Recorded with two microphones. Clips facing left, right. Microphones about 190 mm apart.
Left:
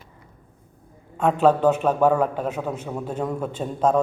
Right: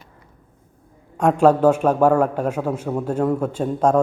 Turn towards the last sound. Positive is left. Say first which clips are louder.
# right 3 dB
turn(degrees=-10)  # may be behind; listen again after turning